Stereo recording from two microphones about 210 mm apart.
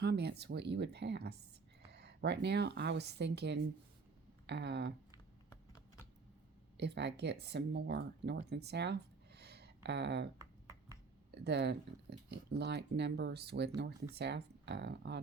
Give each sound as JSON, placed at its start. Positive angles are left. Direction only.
{"t": 0.0, "sound": "speech", "side_deg": -50}
{"t": 6.7, "sound": "speech", "side_deg": -55}
{"t": 11.3, "sound": "speech", "side_deg": -55}